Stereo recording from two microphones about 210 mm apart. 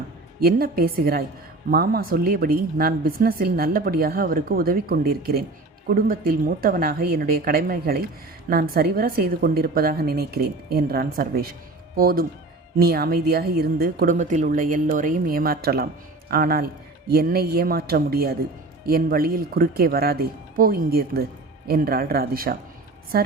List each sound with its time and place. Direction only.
0.3 s a woman's voice: 45° right (ahead or behind)